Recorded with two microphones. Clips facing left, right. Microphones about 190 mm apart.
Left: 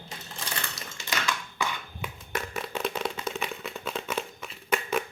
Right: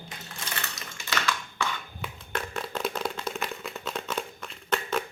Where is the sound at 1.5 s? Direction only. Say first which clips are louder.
Even; 10° left (ahead or behind).